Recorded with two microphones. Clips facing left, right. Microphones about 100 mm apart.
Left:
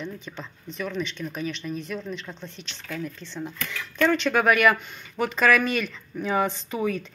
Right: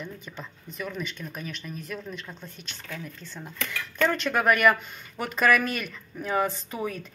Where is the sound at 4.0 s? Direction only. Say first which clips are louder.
Left 3 dB; 5° right (ahead or behind).